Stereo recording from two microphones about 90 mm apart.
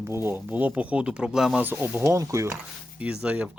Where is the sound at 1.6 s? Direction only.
20° right (ahead or behind).